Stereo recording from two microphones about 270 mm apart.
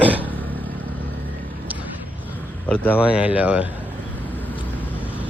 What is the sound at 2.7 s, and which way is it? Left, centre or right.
Speech, centre.